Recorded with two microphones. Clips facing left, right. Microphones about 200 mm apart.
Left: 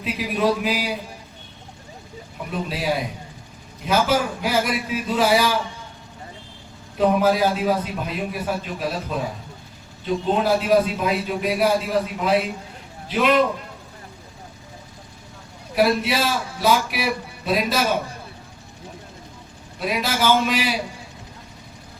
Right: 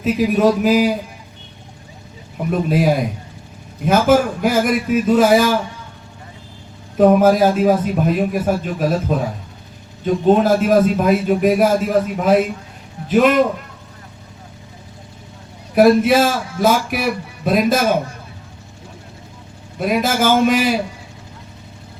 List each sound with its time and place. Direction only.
0.0 s a man's voice: 45° right (ahead or behind)
2.5 s a man's voice: 50° right (ahead or behind)
6.9 s a man's voice: 50° right (ahead or behind)
10.2 s a man's voice: 45° right (ahead or behind)
15.7 s a man's voice: 50° right (ahead or behind)
19.8 s a man's voice: 50° right (ahead or behind)